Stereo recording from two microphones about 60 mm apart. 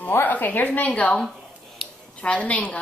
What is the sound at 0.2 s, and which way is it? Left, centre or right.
A woman's voice, left.